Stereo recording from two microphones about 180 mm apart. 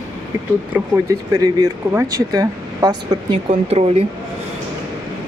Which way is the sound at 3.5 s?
35° right (ahead or behind).